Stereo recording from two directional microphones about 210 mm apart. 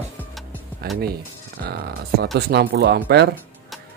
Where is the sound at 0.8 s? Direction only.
45° right (ahead or behind).